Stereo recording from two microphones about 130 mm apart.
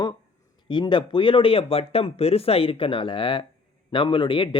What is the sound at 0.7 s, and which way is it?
Speech, 35° left (ahead or behind).